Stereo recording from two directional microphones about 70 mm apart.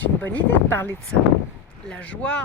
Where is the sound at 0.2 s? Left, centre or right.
Left.